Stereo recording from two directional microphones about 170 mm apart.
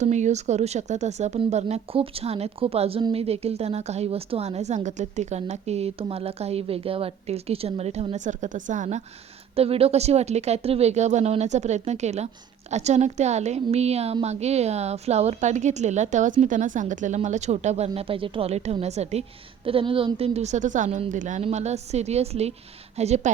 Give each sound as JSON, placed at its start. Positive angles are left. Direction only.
{"t": 0.0, "sound": "speech", "side_deg": -45}